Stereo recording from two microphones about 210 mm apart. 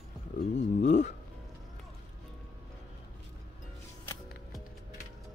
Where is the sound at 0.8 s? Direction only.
35° left (ahead or behind).